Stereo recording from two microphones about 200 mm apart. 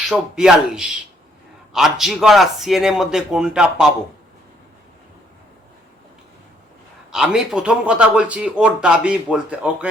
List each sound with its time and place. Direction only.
0.1 s speech: 5° right (ahead or behind)
7.1 s speech: 5° right (ahead or behind)